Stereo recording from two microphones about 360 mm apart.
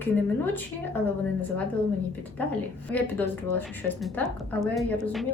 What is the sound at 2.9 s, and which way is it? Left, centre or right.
A woman's voice, centre.